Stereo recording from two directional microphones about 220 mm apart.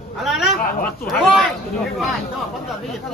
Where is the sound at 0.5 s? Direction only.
40° left (ahead or behind).